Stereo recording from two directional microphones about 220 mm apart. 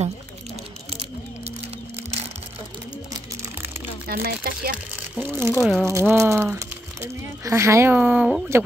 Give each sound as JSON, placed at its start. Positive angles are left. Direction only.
{"t": 4.1, "sound": "speech", "side_deg": -45}
{"t": 5.2, "sound": "speech", "side_deg": -10}
{"t": 5.5, "sound": "speech", "side_deg": 5}
{"t": 5.9, "sound": "speech", "side_deg": -10}